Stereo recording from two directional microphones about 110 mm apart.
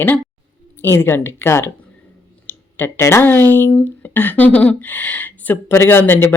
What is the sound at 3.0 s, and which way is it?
Speech, 25° left (ahead or behind).